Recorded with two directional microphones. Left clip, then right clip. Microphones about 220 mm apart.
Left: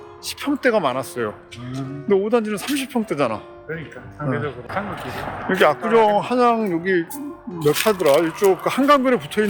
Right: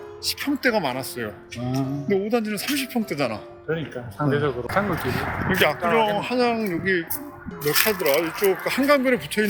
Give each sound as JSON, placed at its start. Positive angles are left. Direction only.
{"t": 0.3, "sound": "speech", "side_deg": 15}
{"t": 4.3, "sound": "a man's voice", "side_deg": -40}
{"t": 5.0, "sound": "speech", "side_deg": 20}
{"t": 7.6, "sound": "speech", "side_deg": -20}
{"t": 7.9, "sound": "speech", "side_deg": 20}